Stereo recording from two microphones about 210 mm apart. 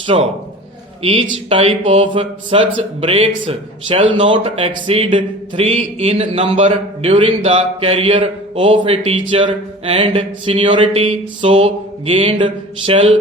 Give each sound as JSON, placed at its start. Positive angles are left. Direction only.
{"t": 0.1, "sound": "speech", "side_deg": -25}